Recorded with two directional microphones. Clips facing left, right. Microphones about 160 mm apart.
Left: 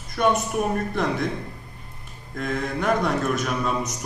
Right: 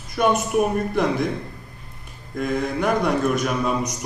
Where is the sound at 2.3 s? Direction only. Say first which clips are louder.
Right 4 dB; centre (ahead or behind).